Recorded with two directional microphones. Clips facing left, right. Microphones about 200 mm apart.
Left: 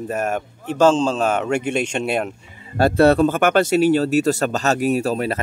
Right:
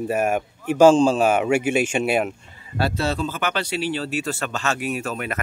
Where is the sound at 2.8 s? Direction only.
55° left (ahead or behind).